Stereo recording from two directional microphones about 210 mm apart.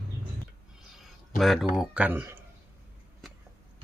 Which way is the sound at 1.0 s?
Centre (ahead or behind).